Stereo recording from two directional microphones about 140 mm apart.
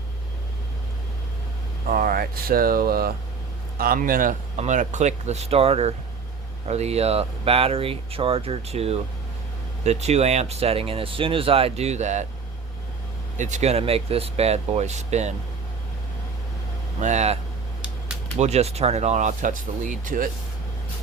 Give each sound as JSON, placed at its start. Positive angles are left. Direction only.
{"t": 1.9, "sound": "a man's voice", "side_deg": -90}
{"t": 4.5, "sound": "speech", "side_deg": -55}
{"t": 13.3, "sound": "speech", "side_deg": -60}
{"t": 17.0, "sound": "speech", "side_deg": -55}
{"t": 18.3, "sound": "speech", "side_deg": -50}